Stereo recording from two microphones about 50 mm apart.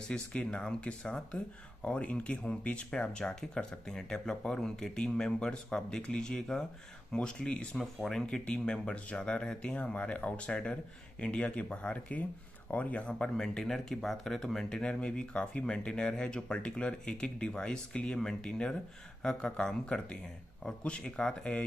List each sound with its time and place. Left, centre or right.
0.1 s speech: centre
7.7 s speech: centre
8.3 s speech: centre
13.4 s speech: centre